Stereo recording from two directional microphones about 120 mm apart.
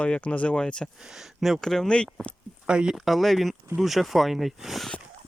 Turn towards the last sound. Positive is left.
turn(degrees=0)  # may be behind; listen again after turning